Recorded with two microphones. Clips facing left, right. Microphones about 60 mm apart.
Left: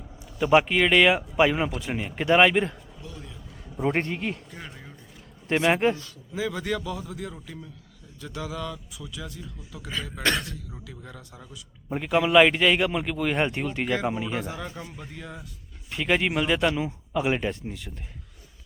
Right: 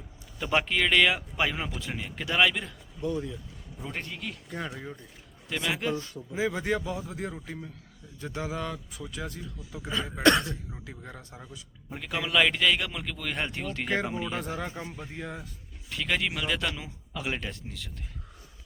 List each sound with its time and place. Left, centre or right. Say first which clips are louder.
0.3 s a man's voice: left 7 dB; centre; by 2.7 s left
4.1 s speech: left 8 dB; left
5.5 s speech: left 8 dB; left
6.0 s a man's voice: right 1 dB; right
9.7 s a man's voice: right 2 dB; right
11.9 s a man's voice: left 9 dB; left
14.5 s a man's voice: right 1 dB; right
15.9 s a man's voice: left 5 dB; left